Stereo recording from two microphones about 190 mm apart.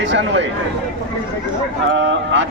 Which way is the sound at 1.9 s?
70° right (ahead or behind).